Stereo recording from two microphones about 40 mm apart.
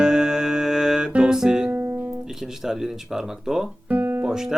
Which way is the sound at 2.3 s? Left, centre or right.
Centre.